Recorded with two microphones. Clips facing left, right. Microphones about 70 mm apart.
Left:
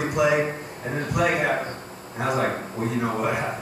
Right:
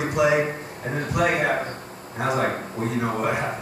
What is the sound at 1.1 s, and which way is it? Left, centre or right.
A man's voice, right.